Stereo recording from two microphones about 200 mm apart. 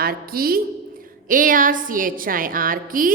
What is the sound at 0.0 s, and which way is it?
A woman's voice, 45° right (ahead or behind).